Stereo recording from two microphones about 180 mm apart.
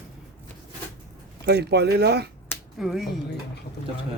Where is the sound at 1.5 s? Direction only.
65° right (ahead or behind).